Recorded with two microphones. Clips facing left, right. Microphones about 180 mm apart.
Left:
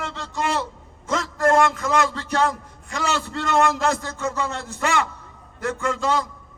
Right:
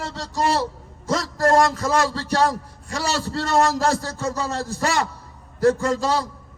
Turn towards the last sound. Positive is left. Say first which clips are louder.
# right 1 dB
turn(degrees=-35)  # may be behind; listen again after turning